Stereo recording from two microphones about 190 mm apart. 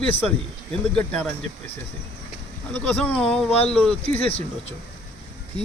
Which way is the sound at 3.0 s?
5° left (ahead or behind).